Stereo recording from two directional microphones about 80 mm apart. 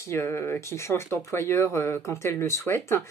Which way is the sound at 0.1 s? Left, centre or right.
Left.